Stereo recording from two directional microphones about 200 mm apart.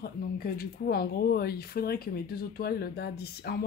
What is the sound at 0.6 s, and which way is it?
Speech, 50° left (ahead or behind).